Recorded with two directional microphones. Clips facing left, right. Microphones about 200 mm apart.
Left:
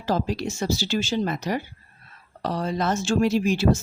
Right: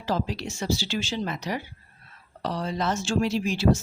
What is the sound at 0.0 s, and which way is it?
Speech, 45° left (ahead or behind).